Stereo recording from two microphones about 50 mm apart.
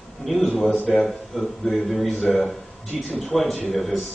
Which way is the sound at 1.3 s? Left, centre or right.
Centre.